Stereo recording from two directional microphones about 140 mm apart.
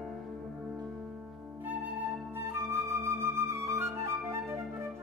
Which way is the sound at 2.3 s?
20° right (ahead or behind).